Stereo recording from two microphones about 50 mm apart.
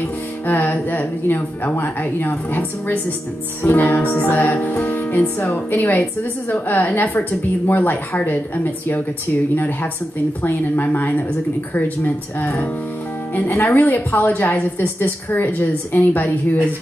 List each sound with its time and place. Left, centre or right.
0.0 s a woman's voice: left
13.7 s a woman's voice: left